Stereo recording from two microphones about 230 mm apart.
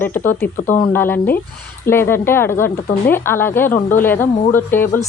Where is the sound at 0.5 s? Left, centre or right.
Left.